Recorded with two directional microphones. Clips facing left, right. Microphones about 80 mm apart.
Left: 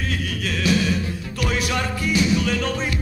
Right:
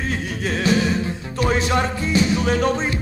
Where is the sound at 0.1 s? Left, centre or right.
Right.